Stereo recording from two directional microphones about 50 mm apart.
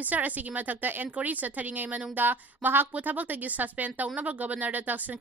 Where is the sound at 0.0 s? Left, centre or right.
Right.